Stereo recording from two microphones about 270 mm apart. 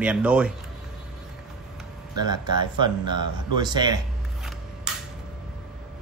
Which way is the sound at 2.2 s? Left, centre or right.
Centre.